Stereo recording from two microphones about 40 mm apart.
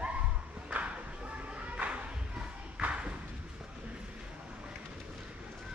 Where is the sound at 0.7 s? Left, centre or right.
Right.